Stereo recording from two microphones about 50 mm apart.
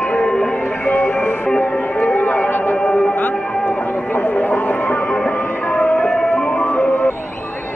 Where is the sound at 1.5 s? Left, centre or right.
Centre; by 2.8 s left.